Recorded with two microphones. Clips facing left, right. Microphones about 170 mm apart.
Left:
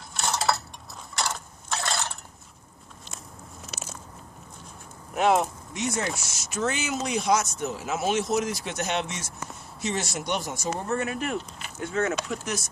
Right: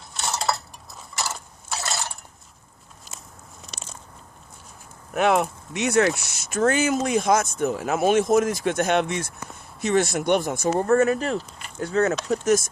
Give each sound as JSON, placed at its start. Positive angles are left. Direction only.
{"t": 0.1, "sound": "dishes", "side_deg": 0}
{"t": 1.1, "sound": "crushing", "side_deg": -5}
{"t": 3.6, "sound": "a sound", "side_deg": 5}
{"t": 5.1, "sound": "speech", "side_deg": -65}